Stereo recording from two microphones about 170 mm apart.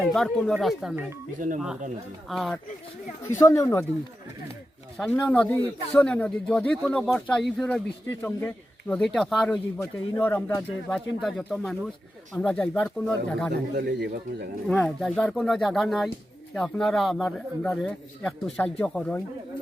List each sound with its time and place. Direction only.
0.0 s a man's voice: centre (ahead or behind)
2.3 s a man's voice: centre (ahead or behind)
3.2 s speech: 15° left (ahead or behind)
4.9 s a man's voice: 5° left (ahead or behind)
8.9 s a man's voice: centre (ahead or behind)
9.8 s a man's voice: 15° left (ahead or behind)
13.5 s speech: 80° right
14.7 s a man's voice: 5° left (ahead or behind)